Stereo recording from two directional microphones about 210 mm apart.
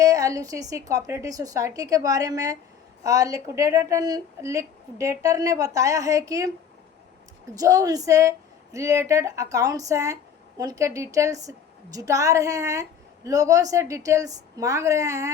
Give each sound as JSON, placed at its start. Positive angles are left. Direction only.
{"t": 0.0, "sound": "a woman's voice", "side_deg": -15}
{"t": 7.5, "sound": "a woman's voice", "side_deg": -15}